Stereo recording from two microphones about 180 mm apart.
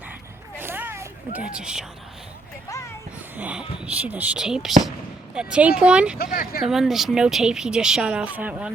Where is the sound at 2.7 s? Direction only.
15° left (ahead or behind).